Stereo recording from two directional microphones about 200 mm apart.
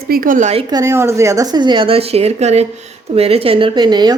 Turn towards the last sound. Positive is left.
turn(degrees=-20)  # may be behind; listen again after turning